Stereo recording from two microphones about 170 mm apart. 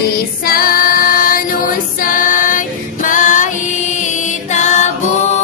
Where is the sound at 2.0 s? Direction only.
50° left (ahead or behind).